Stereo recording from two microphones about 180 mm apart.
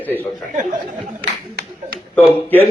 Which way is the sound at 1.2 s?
60° right (ahead or behind).